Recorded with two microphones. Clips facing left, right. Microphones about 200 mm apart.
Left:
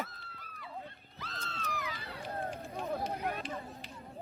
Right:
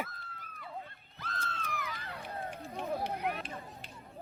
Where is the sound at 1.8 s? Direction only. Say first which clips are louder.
Left 1 dB; 55° right (ahead or behind).